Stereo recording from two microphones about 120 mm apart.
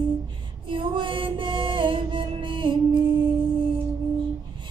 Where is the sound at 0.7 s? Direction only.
45° right (ahead or behind).